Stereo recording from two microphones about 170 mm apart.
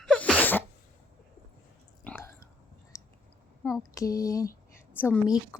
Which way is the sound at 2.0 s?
15° left (ahead or behind).